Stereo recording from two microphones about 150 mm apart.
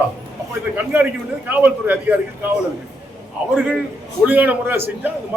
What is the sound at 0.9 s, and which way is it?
A man's voice, 10° right (ahead or behind).